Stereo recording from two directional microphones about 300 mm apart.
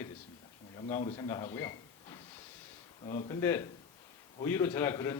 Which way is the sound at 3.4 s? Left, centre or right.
Centre.